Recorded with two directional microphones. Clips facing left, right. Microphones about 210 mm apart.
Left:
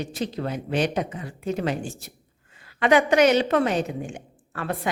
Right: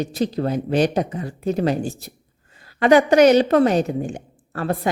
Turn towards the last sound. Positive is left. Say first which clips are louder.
# right 6 dB
turn(degrees=-35)  # may be behind; listen again after turning